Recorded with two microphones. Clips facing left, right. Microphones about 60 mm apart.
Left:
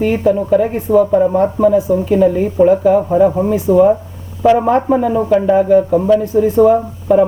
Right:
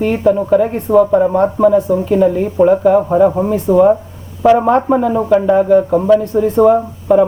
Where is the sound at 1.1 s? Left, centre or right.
Centre.